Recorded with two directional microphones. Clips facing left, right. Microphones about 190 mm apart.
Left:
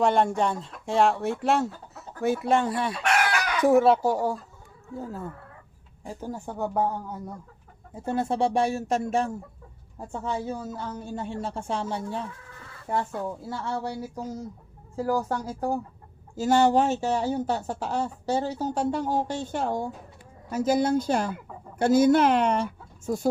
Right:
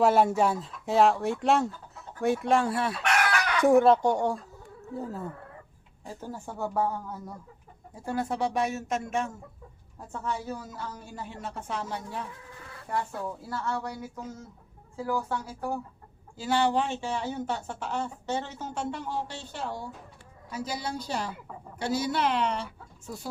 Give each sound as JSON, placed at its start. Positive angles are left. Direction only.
{"t": 0.0, "sound": "speech", "side_deg": -5}
{"t": 6.1, "sound": "a woman's voice", "side_deg": 15}